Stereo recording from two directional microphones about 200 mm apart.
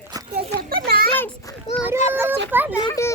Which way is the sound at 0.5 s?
50° right (ahead or behind).